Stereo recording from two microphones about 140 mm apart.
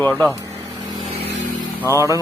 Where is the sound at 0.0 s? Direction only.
5° left (ahead or behind).